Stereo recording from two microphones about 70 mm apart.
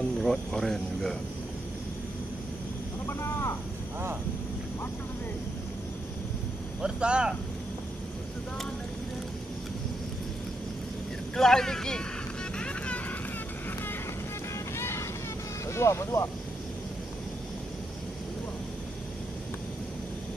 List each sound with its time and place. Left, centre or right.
0.2 s speech: centre
3.1 s a sound: left
6.8 s speech: centre
11.3 s speech: centre
12.5 s vehicle: centre
14.8 s vehicle: left
15.7 s speech: left